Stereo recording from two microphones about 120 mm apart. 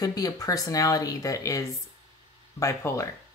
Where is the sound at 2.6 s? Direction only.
25° left (ahead or behind).